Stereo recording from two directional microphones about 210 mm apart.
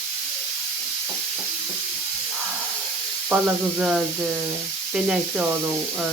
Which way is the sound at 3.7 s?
5° right (ahead or behind).